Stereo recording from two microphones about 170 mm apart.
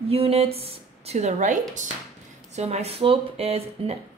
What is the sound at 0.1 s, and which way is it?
Speech, 35° right (ahead or behind).